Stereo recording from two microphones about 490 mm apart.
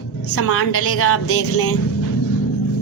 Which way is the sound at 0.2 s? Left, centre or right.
Left.